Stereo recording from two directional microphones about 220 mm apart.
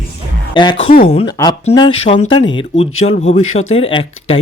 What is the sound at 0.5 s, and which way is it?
Speech, 20° left (ahead or behind).